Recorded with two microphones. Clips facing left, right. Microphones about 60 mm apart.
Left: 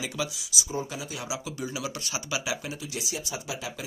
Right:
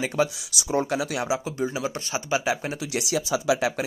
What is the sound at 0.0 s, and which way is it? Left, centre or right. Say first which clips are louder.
Speech: right 8 dB; right.